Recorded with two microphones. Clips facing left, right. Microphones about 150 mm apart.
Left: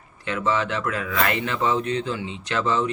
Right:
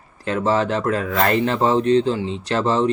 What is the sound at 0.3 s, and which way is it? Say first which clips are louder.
Speech: right 5 dB; 40° right (ahead or behind).